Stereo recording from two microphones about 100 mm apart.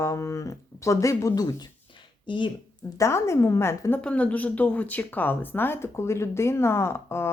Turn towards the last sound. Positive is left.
turn(degrees=25)  # may be behind; listen again after turning